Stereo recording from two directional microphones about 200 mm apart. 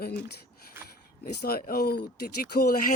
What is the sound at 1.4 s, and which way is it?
Speech, 50° left (ahead or behind).